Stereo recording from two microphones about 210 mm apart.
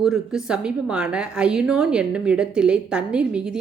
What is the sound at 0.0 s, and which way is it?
A woman's voice, 5° right (ahead or behind).